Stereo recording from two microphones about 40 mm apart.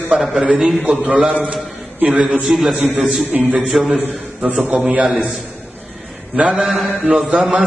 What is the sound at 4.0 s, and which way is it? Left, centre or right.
A man's voice, right.